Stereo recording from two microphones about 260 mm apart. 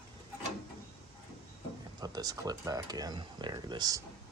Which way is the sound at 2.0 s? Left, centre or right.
Centre.